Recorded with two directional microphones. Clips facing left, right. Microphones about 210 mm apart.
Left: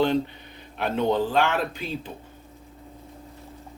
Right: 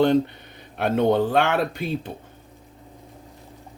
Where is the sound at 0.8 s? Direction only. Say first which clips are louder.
Right 4 dB; 55° right (ahead or behind).